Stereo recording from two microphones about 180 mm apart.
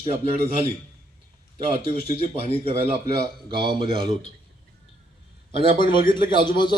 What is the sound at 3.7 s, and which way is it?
Speech, 30° right (ahead or behind).